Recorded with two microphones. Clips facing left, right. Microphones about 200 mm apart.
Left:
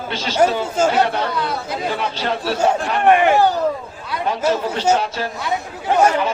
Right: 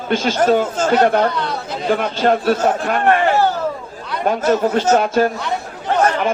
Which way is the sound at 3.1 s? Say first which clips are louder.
Left 2 dB; 15° left (ahead or behind).